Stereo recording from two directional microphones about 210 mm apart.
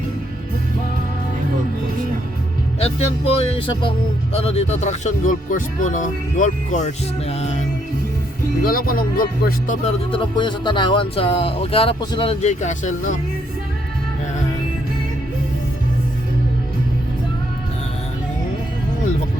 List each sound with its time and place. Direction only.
2.7 s speech: 30° left (ahead or behind)
8.6 s speech: 45° left (ahead or behind)
10.1 s speech: 25° left (ahead or behind)